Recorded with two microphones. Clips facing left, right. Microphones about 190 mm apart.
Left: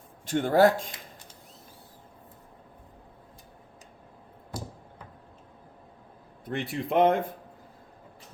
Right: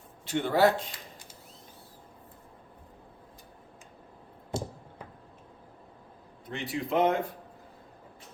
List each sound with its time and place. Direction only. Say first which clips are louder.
0.3 s speech: left 3 dB; 45° left (ahead or behind)
4.5 s a sound: right 5 dB; 25° right (ahead or behind)
6.5 s speech: left 2 dB; 55° left (ahead or behind)